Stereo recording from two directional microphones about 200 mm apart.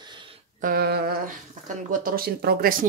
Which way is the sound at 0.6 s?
45° right (ahead or behind).